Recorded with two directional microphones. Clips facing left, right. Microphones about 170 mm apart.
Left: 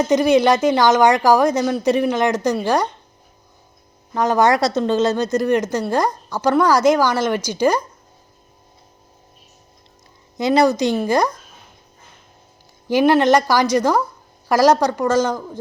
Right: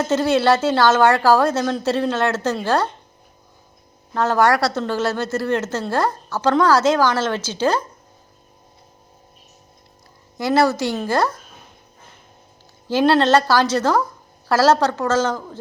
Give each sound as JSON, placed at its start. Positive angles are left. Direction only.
{"t": 0.0, "sound": "a woman's voice", "side_deg": 15}
{"t": 4.1, "sound": "a woman's voice", "side_deg": 15}
{"t": 10.3, "sound": "a woman's voice", "side_deg": 20}
{"t": 12.9, "sound": "a woman's voice", "side_deg": 15}